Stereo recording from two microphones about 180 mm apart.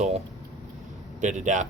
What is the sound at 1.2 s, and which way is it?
Speech, 45° right (ahead or behind).